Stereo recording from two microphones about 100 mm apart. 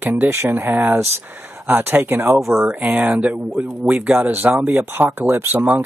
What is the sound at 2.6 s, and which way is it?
Speech, 5° right (ahead or behind).